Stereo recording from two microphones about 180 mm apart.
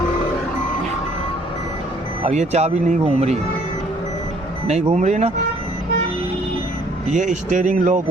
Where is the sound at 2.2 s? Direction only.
40° right (ahead or behind).